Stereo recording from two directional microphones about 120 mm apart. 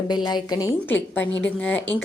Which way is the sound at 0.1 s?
35° left (ahead or behind).